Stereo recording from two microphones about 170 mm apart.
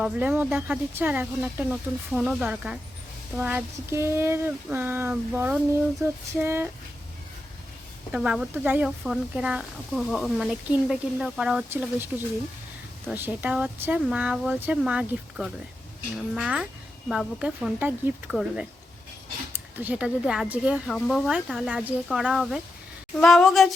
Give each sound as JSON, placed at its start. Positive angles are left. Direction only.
{"t": 0.0, "sound": "speech", "side_deg": -10}
{"t": 8.1, "sound": "speech", "side_deg": -5}